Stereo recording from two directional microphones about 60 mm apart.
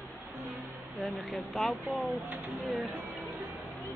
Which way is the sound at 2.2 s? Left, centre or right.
Right.